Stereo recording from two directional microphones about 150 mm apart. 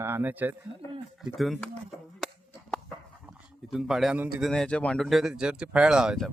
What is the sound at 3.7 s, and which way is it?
Speech, 5° right (ahead or behind).